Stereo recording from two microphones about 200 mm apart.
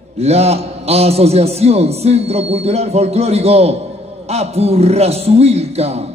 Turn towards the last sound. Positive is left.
turn(degrees=-30)  # may be behind; listen again after turning